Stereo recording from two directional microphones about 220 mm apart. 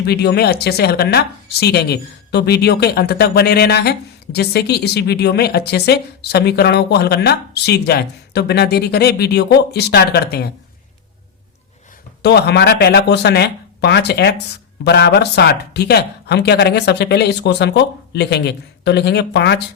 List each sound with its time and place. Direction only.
0.0 s speech: 45° left (ahead or behind)
12.2 s speech: 50° left (ahead or behind)